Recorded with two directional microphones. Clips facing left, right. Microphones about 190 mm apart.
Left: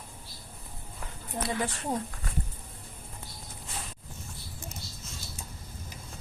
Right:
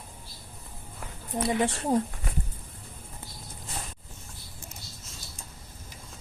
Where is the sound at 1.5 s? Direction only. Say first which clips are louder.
Right 6 dB; 25° right (ahead or behind).